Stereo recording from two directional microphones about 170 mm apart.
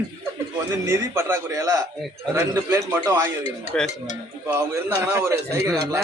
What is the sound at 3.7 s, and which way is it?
Speech, 5° left (ahead or behind).